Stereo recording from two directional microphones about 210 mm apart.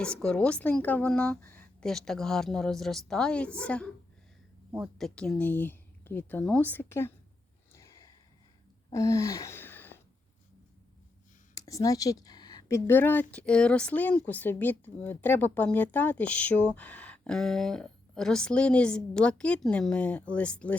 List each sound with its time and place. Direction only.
0.0 s speech: 5° left (ahead or behind)
7.7 s a sound: 15° left (ahead or behind)
8.9 s gasp: 15° left (ahead or behind)
11.5 s speech: 15° left (ahead or behind)